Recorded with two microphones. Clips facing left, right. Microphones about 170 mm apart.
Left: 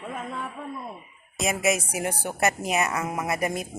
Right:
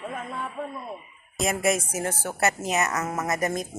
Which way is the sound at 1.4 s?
Centre (ahead or behind).